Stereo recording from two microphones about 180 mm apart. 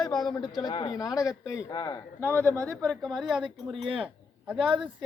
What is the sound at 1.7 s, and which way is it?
Speech, 20° left (ahead or behind).